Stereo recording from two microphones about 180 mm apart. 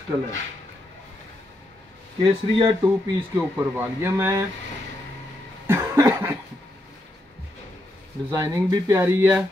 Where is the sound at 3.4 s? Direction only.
10° right (ahead or behind).